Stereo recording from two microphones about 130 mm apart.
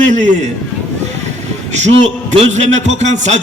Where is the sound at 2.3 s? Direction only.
55° right (ahead or behind).